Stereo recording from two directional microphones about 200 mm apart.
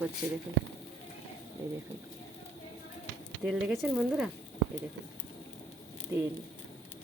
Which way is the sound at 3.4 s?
Centre (ahead or behind).